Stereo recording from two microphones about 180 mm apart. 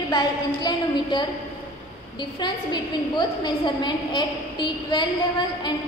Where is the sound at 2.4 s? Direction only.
25° left (ahead or behind).